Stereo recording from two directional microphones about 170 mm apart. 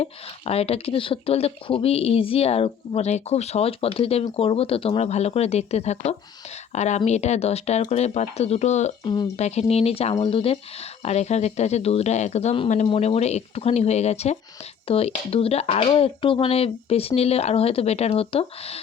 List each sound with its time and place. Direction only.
0.0 s speech: 35° left (ahead or behind)
9.0 s speech: 25° left (ahead or behind)
9.4 s speech: 40° left (ahead or behind)